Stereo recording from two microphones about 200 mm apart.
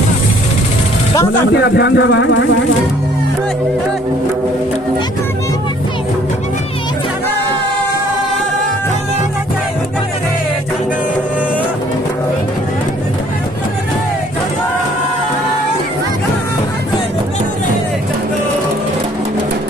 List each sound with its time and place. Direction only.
1.5 s speech: 60° left (ahead or behind)